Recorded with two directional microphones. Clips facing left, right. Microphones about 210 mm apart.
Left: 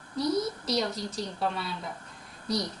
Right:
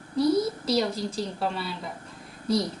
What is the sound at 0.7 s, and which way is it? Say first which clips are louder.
A woman's voice: right 4 dB; centre (ahead or behind).